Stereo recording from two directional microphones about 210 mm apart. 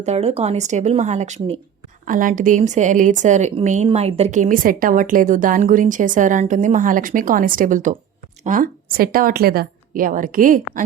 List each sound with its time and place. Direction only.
0.0 s a woman's voice: 30° right (ahead or behind)